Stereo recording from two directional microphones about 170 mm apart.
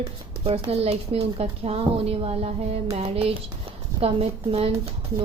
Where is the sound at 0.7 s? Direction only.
35° right (ahead or behind).